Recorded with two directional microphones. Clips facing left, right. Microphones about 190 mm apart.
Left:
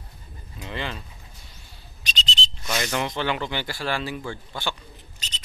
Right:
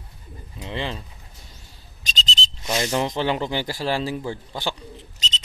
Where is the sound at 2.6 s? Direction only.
25° right (ahead or behind).